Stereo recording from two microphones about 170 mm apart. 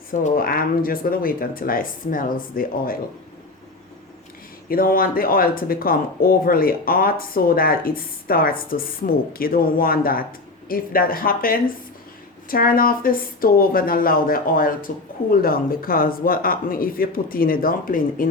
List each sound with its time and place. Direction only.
0.1 s speech: 55° left (ahead or behind)
4.7 s speech: 60° left (ahead or behind)